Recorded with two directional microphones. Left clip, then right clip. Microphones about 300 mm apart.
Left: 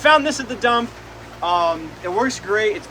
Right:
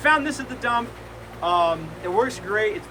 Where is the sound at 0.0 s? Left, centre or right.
Centre.